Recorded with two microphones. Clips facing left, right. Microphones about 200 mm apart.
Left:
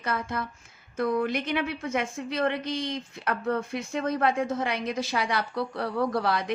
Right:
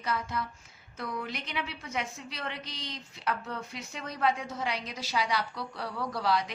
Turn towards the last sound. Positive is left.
turn(degrees=55)  # may be behind; listen again after turning